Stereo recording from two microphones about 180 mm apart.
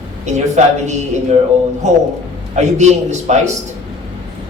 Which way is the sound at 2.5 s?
40° right (ahead or behind).